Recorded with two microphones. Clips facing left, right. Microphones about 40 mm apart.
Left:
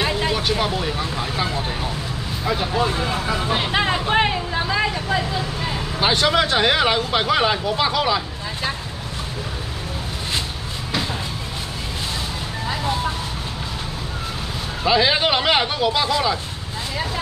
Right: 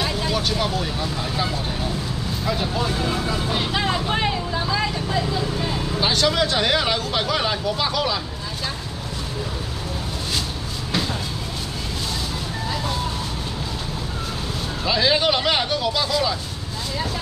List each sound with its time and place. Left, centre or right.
0.0 s vehicle: left
1.0 s speech: centre
14.9 s speech: centre